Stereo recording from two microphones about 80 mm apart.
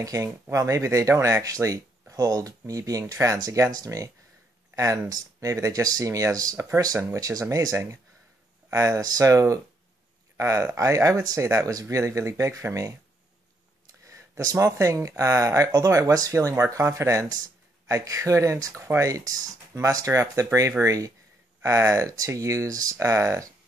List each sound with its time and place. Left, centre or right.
0.0 s speech: right
6.5 s speech: right
7.2 s speech: right
14.0 s speech: right